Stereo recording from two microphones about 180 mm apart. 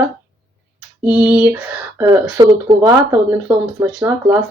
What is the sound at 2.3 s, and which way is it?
Speech, 25° right (ahead or behind).